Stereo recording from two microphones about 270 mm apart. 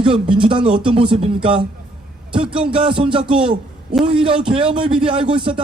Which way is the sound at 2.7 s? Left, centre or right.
Centre.